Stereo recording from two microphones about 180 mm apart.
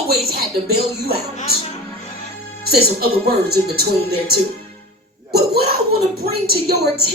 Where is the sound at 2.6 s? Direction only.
60° right (ahead or behind).